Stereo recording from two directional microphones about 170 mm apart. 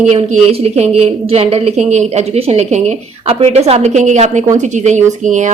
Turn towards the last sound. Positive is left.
turn(degrees=-45)  # may be behind; listen again after turning